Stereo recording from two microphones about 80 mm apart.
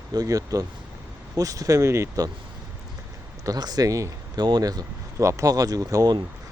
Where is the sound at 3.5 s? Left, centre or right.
Right.